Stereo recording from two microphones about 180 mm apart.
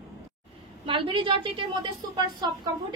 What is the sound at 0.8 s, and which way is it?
A woman's voice, 30° right (ahead or behind).